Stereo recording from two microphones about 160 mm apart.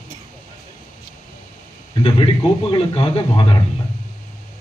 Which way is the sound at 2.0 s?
30° left (ahead or behind).